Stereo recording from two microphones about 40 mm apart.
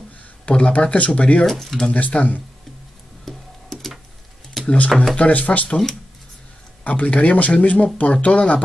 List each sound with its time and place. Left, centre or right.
0.5 s speech: left
1.4 s speech: centre
1.9 s speech: left
3.3 s music: centre
4.6 s speech: left
6.8 s speech: left